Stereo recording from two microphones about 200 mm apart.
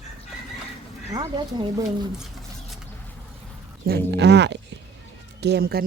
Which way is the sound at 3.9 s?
55° right (ahead or behind).